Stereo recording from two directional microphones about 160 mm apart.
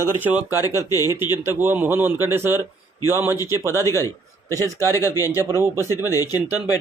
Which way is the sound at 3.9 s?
20° left (ahead or behind).